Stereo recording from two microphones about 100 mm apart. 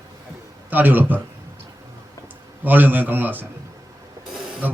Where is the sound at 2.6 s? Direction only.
20° right (ahead or behind).